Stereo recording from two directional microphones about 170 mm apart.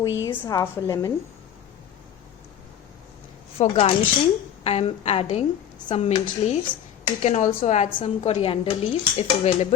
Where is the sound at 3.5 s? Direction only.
35° left (ahead or behind).